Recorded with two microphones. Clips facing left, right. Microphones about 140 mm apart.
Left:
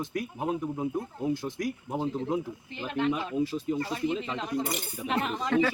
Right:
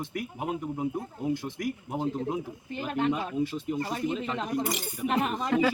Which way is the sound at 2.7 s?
45° right (ahead or behind).